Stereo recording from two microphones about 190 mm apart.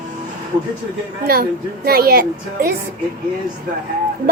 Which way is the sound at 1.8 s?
55° right (ahead or behind).